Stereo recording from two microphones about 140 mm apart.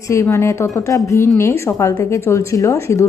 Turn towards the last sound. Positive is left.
turn(degrees=20)  # may be behind; listen again after turning